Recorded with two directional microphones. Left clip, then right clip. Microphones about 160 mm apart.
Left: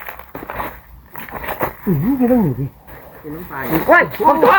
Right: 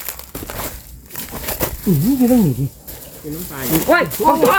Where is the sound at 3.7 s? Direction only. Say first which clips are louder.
Left 3 dB; 25° right (ahead or behind).